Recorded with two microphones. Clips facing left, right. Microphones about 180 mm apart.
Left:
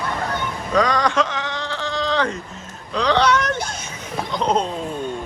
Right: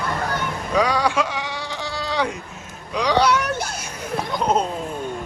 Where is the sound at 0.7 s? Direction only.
10° right (ahead or behind).